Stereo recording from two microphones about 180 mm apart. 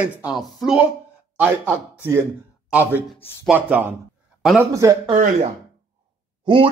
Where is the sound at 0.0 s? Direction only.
5° right (ahead or behind).